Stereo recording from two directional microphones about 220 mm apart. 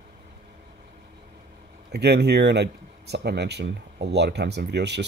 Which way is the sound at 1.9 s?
50° right (ahead or behind).